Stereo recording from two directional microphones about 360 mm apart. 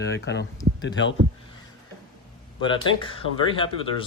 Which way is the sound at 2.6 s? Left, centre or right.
Centre.